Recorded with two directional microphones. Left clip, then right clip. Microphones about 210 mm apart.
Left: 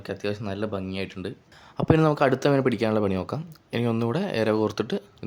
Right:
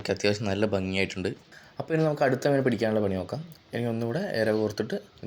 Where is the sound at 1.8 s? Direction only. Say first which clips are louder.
Left 4 dB; 25° left (ahead or behind).